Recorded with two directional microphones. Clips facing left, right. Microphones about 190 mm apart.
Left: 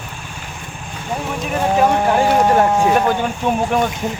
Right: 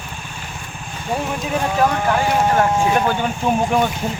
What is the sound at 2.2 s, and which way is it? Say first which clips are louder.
Speech: left 3 dB; 40° left (ahead or behind).